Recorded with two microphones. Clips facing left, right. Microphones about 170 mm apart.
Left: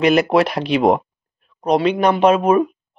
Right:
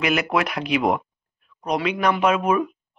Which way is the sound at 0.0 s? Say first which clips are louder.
Left 8 dB; 35° left (ahead or behind).